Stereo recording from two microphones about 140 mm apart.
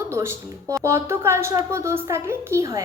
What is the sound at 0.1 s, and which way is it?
A woman's voice, 20° right (ahead or behind).